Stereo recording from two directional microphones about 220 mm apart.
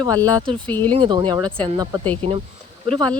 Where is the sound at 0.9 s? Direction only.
25° right (ahead or behind).